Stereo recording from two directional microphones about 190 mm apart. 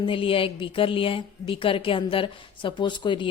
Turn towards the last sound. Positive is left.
turn(degrees=25)  # may be behind; listen again after turning